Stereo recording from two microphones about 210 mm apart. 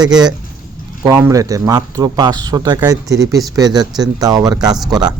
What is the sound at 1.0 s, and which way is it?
Speech, 15° right (ahead or behind).